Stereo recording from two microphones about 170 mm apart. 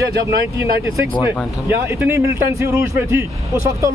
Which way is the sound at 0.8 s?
15° right (ahead or behind).